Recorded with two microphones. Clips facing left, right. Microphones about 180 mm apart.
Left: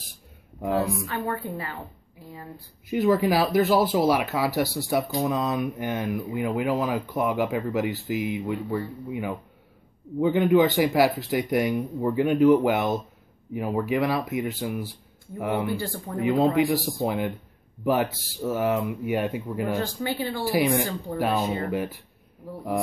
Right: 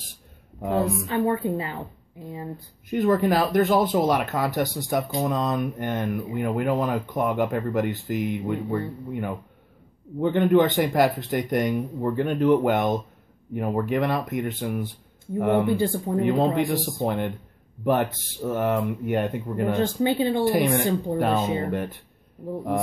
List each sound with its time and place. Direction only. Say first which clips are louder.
0.6 s speech: right 1 dB; 5° left (ahead or behind)
1.0 s a woman's voice: right 6 dB; 20° right (ahead or behind)
2.9 s speech: even; 5° left (ahead or behind)
19.8 s a woman's voice: right 6 dB; 20° right (ahead or behind)
20.4 s speech: left 2 dB; 5° left (ahead or behind)
21.1 s a woman's voice: right 4 dB; 25° right (ahead or behind)
21.6 s speech: even; 5° left (ahead or behind)